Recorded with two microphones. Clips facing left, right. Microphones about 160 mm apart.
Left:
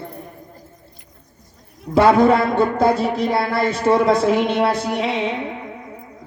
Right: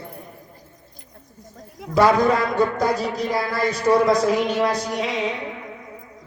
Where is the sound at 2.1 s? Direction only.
30° left (ahead or behind).